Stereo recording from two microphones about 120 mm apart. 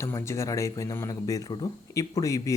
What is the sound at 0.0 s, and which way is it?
Speech, 25° left (ahead or behind).